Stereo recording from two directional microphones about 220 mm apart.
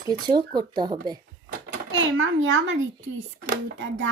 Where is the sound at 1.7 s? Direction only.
60° right (ahead or behind).